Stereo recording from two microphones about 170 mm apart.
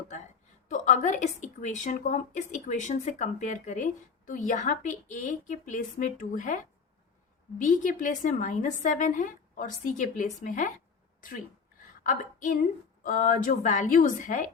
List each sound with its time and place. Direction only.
0.7 s a woman's voice: 45° left (ahead or behind)
7.7 s a woman's voice: 50° left (ahead or behind)
12.0 s female singing: 50° left (ahead or behind)
13.0 s a woman's voice: 50° left (ahead or behind)